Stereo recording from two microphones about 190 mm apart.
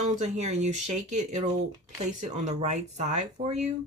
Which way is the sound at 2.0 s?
40° right (ahead or behind).